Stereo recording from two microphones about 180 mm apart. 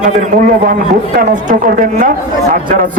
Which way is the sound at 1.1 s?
50° right (ahead or behind).